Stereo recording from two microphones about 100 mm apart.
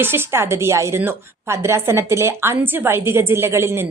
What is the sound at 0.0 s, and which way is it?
A woman's voice, 25° right (ahead or behind).